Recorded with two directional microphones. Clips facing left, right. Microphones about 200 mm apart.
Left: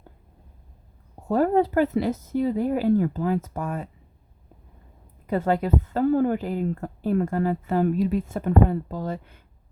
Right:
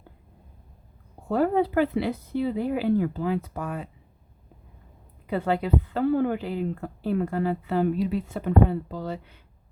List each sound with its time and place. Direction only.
1.3 s a woman's voice: 45° left (ahead or behind)
5.2 s a woman's voice: 45° left (ahead or behind)